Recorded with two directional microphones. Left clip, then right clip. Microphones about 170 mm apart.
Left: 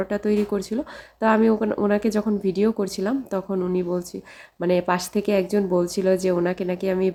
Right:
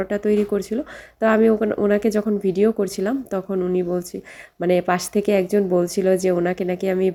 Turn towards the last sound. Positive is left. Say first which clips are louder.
# right 2 dB
turn(degrees=-10)  # may be behind; listen again after turning